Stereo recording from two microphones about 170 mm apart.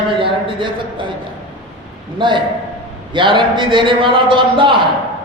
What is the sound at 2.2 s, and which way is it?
A man's voice, 30° right (ahead or behind).